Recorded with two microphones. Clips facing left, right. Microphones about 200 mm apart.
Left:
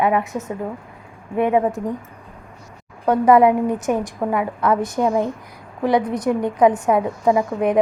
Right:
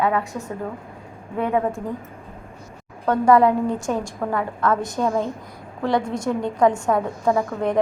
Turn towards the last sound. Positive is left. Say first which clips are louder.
# left 3 dB
turn(degrees=15)  # may be behind; listen again after turning